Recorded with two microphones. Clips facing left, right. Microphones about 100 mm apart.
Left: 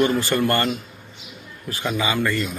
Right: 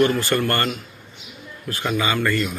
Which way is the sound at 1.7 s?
20° left (ahead or behind).